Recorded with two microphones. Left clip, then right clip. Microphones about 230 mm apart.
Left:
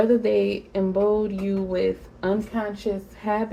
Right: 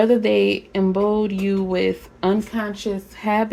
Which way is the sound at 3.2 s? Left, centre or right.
Right.